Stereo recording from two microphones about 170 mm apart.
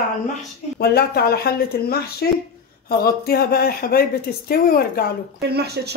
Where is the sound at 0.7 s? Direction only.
65° left (ahead or behind).